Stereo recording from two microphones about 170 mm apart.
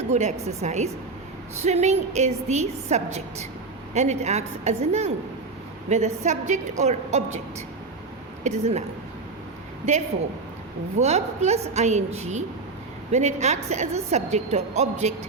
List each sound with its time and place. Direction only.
0.0 s a woman's voice: 40° right (ahead or behind)
8.4 s a woman's voice: 40° right (ahead or behind)
10.9 s a woman's voice: 40° right (ahead or behind)